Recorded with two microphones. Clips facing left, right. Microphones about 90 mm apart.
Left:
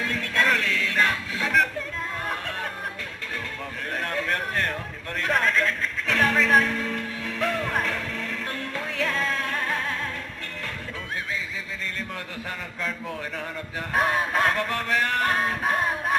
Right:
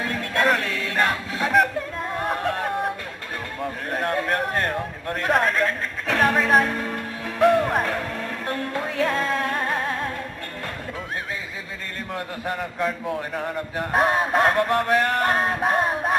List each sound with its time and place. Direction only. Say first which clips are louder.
0.2 s music: right 3 dB; 30° right (ahead or behind)
2.1 s a sound: right 9 dB; 40° right (ahead or behind)
3.9 s a man's voice: right 4 dB; 35° right (ahead or behind)
7.5 s music: right 6 dB; 35° right (ahead or behind)
12.1 s a man's voice: right 6 dB; 45° right (ahead or behind)